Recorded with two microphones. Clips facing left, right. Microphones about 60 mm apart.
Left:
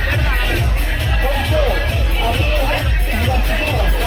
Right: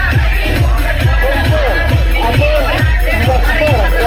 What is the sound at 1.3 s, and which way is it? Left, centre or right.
Music, right.